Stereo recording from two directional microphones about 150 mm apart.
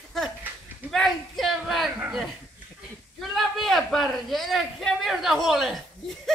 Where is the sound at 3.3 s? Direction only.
Centre (ahead or behind).